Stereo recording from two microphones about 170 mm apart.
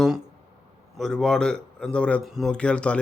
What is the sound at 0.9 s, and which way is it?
Speech, 5° left (ahead or behind).